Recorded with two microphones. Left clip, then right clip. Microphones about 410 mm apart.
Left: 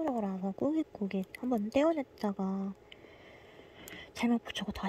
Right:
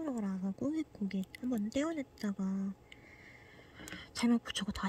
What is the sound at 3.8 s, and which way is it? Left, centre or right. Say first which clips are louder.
Speech: left 1 dB; centre.